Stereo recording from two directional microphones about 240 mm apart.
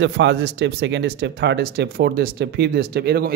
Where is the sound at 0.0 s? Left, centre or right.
Right.